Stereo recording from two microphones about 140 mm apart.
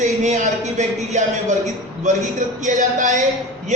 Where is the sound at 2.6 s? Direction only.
65° right (ahead or behind).